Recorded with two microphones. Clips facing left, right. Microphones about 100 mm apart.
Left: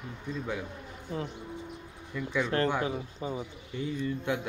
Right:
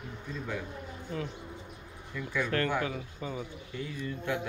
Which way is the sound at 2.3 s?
20° left (ahead or behind).